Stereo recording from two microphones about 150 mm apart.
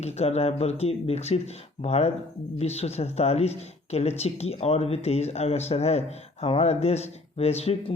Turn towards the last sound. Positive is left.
turn(degrees=45)  # may be behind; listen again after turning